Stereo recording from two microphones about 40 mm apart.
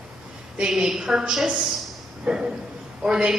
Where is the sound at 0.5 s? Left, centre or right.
Centre.